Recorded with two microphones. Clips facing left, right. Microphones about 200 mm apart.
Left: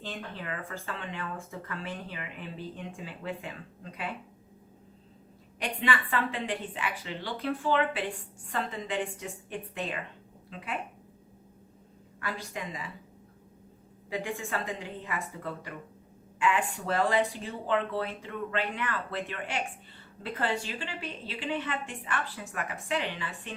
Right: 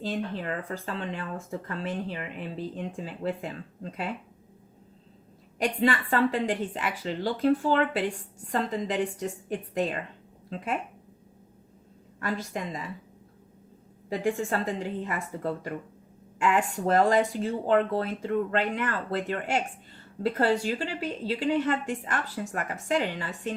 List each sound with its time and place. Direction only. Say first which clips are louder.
0.0 s a woman's voice: right 8 dB; 40° right (ahead or behind)
5.5 s a woman's voice: right 6 dB; 40° right (ahead or behind)
12.2 s a woman's voice: right 5 dB; 40° right (ahead or behind)
14.1 s a woman's voice: right 6 dB; 40° right (ahead or behind)